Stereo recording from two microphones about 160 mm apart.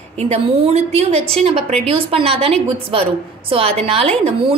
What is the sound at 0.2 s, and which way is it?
A woman's voice, 40° right (ahead or behind).